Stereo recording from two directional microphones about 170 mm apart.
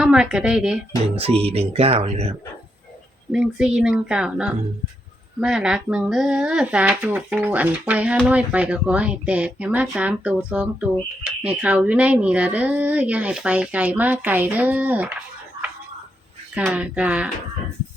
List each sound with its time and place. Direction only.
0.0 s speech: 5° right (ahead or behind)
1.1 s speech: 35° right (ahead or behind)
3.3 s speech: 5° right (ahead or behind)
16.6 s speech: 5° right (ahead or behind)